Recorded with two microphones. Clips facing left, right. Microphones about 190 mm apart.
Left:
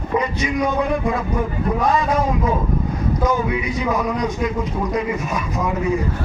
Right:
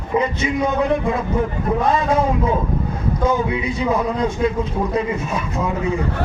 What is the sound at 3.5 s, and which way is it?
Speech, 30° right (ahead or behind).